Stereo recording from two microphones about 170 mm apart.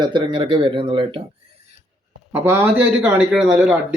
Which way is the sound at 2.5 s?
10° right (ahead or behind).